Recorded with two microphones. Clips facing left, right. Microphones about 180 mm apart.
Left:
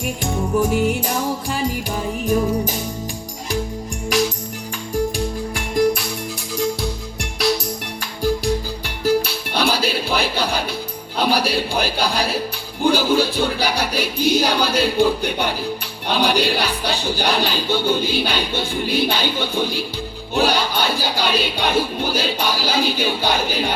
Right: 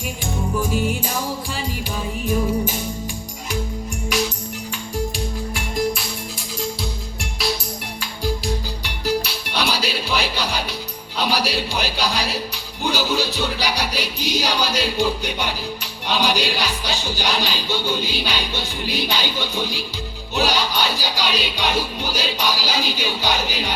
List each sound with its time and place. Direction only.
2.2 s music: 45° left (ahead or behind)
5.5 s music: 50° left (ahead or behind)
9.0 s music: 50° left (ahead or behind)